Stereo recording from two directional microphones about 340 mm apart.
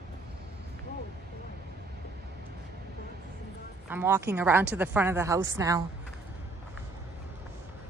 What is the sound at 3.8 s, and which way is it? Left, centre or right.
A woman's voice, centre.